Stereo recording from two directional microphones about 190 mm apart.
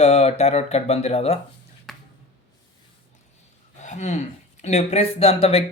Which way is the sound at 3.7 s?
40° left (ahead or behind).